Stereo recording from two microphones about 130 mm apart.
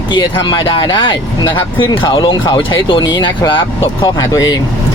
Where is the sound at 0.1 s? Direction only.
40° left (ahead or behind).